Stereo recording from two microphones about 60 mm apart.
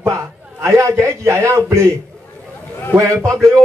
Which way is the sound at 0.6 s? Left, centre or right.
Right.